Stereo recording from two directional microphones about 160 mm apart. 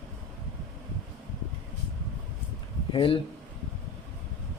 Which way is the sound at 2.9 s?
35° left (ahead or behind).